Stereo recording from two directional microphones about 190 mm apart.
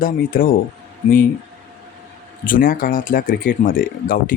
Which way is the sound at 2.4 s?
45° left (ahead or behind).